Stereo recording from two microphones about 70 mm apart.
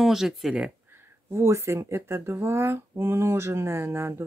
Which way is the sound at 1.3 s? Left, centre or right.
Right.